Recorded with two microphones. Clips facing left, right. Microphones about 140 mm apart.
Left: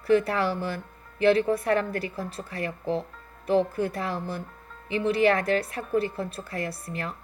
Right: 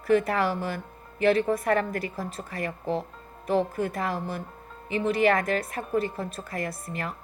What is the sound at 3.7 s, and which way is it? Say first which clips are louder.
Speech: left 1 dB; 30° left (ahead or behind).